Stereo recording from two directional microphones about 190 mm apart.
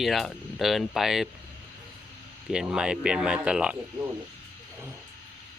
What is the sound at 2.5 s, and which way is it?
Speech, 5° right (ahead or behind).